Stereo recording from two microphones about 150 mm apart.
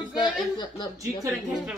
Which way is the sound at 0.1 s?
30° left (ahead or behind).